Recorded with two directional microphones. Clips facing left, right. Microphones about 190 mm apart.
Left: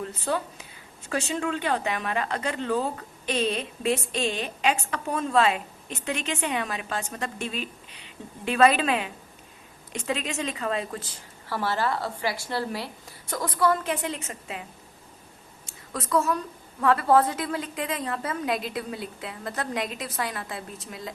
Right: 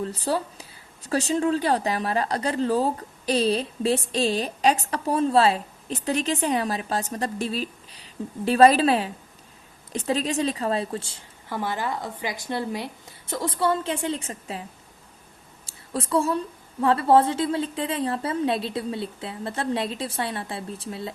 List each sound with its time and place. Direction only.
0.0 s a woman's voice: 35° right (ahead or behind)
15.6 s a sound: 30° right (ahead or behind)
16.8 s a woman's voice: 30° right (ahead or behind)